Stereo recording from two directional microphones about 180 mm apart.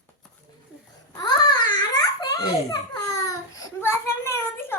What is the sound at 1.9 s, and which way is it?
Baby laughter, 20° left (ahead or behind).